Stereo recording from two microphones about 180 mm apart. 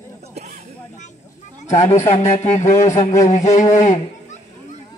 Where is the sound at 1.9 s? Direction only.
35° left (ahead or behind).